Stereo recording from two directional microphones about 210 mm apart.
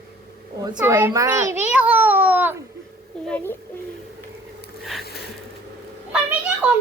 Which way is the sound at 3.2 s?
5° left (ahead or behind).